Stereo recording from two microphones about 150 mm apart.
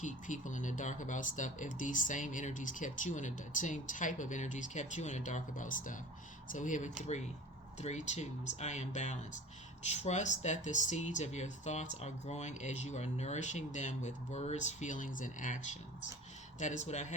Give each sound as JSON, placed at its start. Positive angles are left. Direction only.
{"t": 0.0, "sound": "speech", "side_deg": 55}